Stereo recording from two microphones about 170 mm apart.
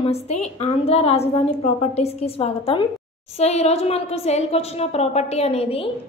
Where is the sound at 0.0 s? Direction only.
40° left (ahead or behind).